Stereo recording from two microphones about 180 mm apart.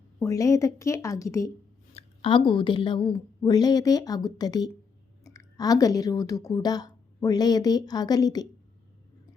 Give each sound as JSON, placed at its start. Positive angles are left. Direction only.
{"t": 0.2, "sound": "speech", "side_deg": 15}
{"t": 1.9, "sound": "a woman's voice", "side_deg": 35}